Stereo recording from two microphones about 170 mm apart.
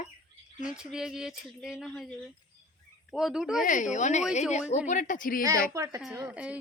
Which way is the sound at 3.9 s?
45° left (ahead or behind).